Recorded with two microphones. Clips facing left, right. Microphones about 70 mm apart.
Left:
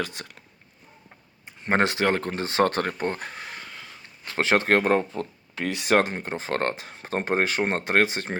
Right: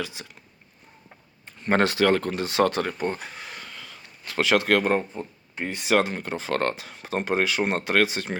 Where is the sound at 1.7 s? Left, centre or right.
Left.